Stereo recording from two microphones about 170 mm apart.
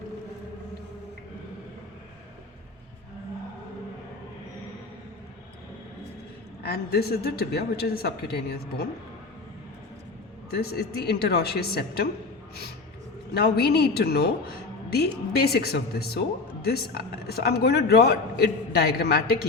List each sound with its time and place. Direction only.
6.6 s speech: 70° left (ahead or behind)
10.5 s speech: 65° left (ahead or behind)
13.3 s speech: 65° left (ahead or behind)